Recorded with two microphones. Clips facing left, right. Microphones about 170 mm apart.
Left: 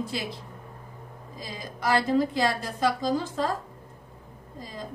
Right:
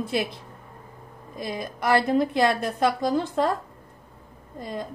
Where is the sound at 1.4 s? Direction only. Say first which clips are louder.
Right 7 dB; 60° right (ahead or behind).